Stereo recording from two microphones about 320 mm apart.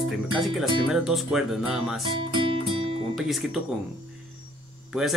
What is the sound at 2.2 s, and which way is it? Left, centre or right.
Music, centre.